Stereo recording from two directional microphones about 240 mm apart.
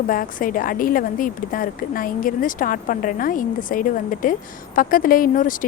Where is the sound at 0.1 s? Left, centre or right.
Left.